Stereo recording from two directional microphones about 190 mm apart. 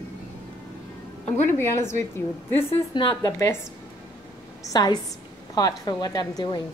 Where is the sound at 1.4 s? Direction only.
15° left (ahead or behind).